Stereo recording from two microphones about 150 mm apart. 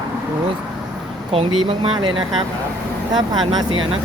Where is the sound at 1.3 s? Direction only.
40° right (ahead or behind).